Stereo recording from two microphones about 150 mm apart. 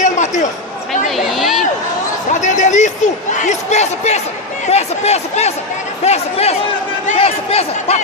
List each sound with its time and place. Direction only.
0.0 s a sound: 55° left (ahead or behind)
1.1 s a woman's voice: centre (ahead or behind)
2.3 s a man's voice: 55° left (ahead or behind)